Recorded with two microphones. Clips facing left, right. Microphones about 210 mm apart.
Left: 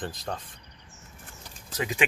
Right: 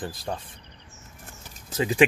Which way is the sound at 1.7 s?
30° right (ahead or behind).